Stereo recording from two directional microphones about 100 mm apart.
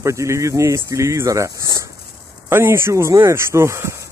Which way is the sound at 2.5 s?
25° right (ahead or behind).